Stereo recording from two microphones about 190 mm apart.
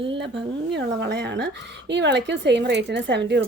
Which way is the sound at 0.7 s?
65° right (ahead or behind).